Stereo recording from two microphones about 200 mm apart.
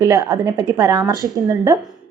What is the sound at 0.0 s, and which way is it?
A woman's voice, 20° right (ahead or behind).